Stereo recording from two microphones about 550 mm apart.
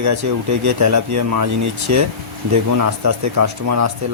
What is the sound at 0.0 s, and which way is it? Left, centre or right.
Speech, right.